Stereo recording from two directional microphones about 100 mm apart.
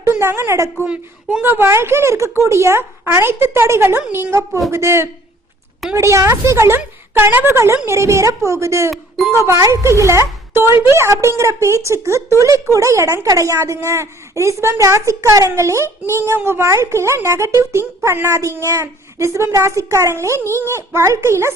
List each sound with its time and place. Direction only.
0.0 s a woman's voice: 25° right (ahead or behind)
0.9 s a woman's voice: 15° right (ahead or behind)
8.9 s speech: centre (ahead or behind)
9.5 s a woman's voice: 35° right (ahead or behind)